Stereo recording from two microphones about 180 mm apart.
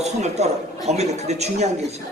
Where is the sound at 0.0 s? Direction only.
35° right (ahead or behind).